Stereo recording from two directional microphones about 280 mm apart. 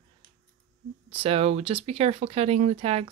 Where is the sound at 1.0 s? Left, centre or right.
Centre.